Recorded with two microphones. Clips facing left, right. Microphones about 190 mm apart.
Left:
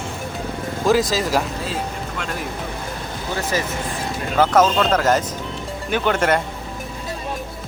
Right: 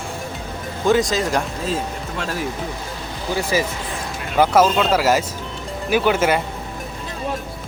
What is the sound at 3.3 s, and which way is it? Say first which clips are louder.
Speech: right 3 dB; 10° right (ahead or behind).